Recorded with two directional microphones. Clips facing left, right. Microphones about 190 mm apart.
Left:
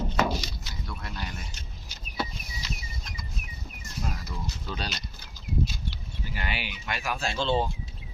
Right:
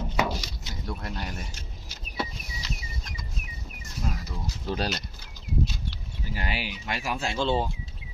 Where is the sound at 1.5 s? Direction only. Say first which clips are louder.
Right 2 dB; 10° right (ahead or behind).